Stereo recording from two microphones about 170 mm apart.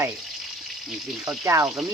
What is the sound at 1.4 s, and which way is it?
Speech, 15° right (ahead or behind).